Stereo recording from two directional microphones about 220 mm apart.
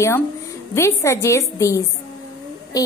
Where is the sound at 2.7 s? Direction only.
15° left (ahead or behind).